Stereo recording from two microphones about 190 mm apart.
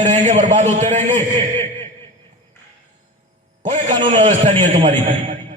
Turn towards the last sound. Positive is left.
turn(degrees=-35)  # may be behind; listen again after turning